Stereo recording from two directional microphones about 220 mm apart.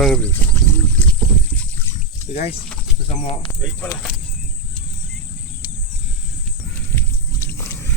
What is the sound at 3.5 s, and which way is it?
Speech, 10° left (ahead or behind).